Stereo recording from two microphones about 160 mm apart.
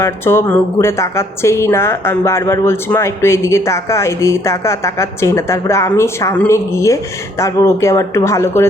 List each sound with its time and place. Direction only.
0.0 s speech: 15° left (ahead or behind)